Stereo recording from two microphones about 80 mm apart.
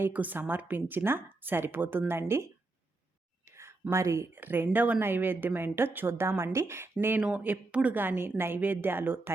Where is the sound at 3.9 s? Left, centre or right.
Right.